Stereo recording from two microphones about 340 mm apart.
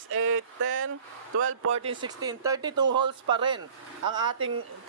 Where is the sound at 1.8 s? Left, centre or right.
Centre.